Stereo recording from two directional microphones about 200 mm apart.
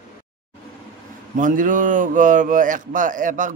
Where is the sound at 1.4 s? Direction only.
40° right (ahead or behind).